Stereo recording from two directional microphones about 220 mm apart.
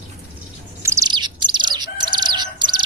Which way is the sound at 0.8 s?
15° right (ahead or behind).